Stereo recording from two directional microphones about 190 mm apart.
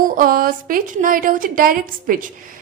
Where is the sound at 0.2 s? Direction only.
50° right (ahead or behind).